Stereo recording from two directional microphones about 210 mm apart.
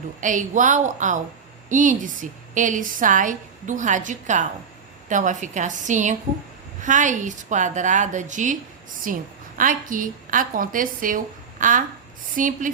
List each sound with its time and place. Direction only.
0.2 s a woman's voice: 35° right (ahead or behind)